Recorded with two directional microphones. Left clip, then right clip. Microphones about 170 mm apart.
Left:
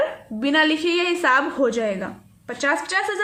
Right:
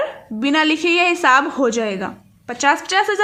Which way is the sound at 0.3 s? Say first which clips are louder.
Right 2 dB; 25° right (ahead or behind).